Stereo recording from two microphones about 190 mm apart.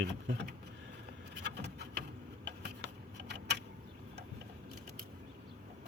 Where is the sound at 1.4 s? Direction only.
60° right (ahead or behind).